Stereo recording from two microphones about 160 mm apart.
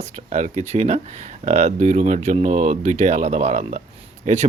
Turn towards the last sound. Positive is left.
turn(degrees=-45)  # may be behind; listen again after turning